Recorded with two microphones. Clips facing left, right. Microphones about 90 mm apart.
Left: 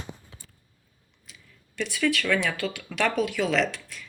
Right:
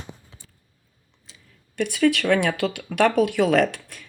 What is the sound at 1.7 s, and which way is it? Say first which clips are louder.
Speech: right 6 dB; 55° right (ahead or behind).